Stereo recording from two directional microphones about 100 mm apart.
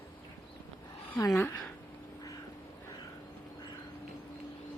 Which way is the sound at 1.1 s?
25° left (ahead or behind).